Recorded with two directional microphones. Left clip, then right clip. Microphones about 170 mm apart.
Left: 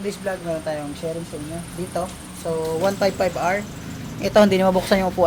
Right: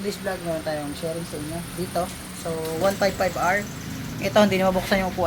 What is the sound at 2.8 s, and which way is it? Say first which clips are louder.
Speech: even; 60° left (ahead or behind).